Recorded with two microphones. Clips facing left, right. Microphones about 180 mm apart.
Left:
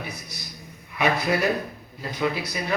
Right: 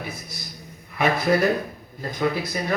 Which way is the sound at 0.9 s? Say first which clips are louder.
Right 3 dB; 50° right (ahead or behind).